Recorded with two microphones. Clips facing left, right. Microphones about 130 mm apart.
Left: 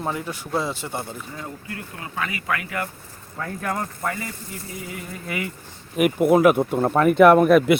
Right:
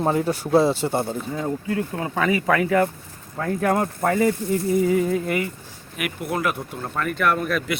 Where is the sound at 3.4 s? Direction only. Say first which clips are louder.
Right 6 dB; 55° right (ahead or behind).